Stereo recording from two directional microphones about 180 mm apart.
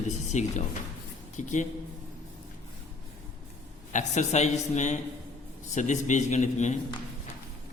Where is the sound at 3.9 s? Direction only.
40° left (ahead or behind).